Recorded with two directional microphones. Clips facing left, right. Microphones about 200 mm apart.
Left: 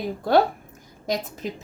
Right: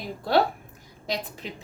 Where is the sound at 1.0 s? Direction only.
45° left (ahead or behind).